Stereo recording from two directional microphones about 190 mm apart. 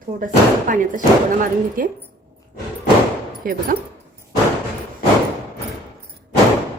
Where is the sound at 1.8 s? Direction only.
45° right (ahead or behind).